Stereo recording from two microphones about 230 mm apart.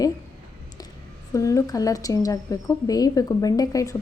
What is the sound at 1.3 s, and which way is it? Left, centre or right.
A woman's voice, centre.